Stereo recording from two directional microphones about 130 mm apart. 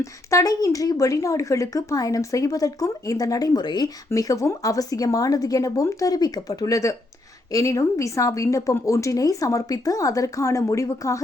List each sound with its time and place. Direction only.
0.0 s a woman's voice: 25° left (ahead or behind)